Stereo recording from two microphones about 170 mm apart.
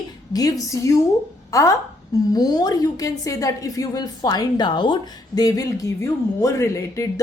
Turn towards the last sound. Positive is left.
turn(degrees=20)  # may be behind; listen again after turning